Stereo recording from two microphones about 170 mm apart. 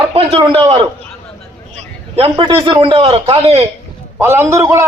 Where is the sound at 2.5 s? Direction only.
25° right (ahead or behind).